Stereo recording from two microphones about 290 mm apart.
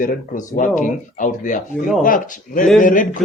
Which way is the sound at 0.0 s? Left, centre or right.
Left.